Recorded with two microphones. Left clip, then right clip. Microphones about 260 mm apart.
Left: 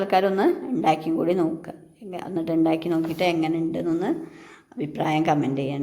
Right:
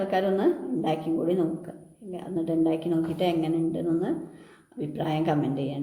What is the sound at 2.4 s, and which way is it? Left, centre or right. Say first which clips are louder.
A woman's voice: left 3 dB; left.